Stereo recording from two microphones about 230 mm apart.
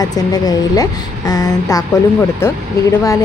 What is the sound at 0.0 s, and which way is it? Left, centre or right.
Speech, centre.